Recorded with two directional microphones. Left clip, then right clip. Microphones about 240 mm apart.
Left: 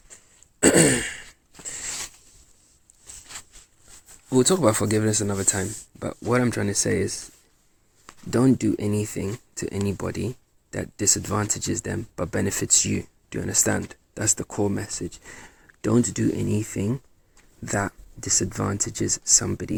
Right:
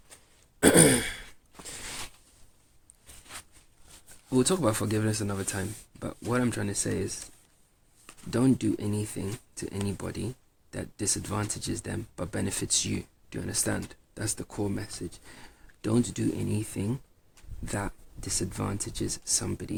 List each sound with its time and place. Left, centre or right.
0.6 s throat clearing: centre
1.6 s a sound: centre
4.3 s speech: centre
8.3 s speech: centre